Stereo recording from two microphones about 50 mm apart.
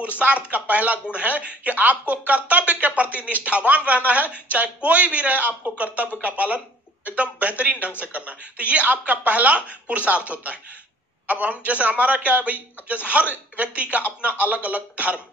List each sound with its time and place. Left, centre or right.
0.2 s a man's voice: right